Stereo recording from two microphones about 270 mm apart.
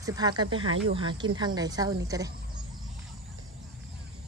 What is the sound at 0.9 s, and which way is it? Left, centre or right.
Speech, centre.